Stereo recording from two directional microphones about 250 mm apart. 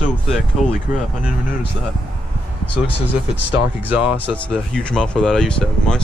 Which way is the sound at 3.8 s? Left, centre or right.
Centre.